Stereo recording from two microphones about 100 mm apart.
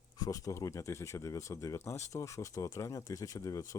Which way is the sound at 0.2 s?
35° left (ahead or behind).